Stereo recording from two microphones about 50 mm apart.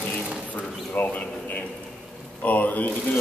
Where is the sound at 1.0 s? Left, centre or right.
Left.